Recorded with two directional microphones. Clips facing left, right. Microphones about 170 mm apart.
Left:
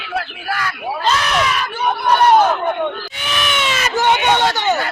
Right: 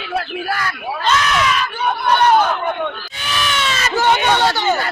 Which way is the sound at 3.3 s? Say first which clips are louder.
Left 1 dB; 15° left (ahead or behind).